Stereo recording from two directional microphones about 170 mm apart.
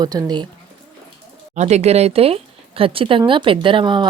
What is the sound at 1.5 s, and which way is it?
Speech, 40° right (ahead or behind).